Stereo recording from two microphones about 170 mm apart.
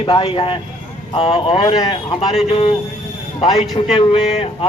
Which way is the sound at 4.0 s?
35° left (ahead or behind).